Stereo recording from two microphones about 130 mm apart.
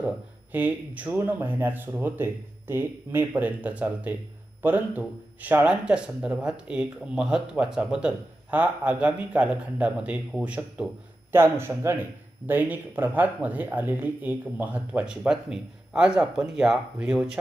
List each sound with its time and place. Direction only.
0.5 s a man's voice: 10° right (ahead or behind)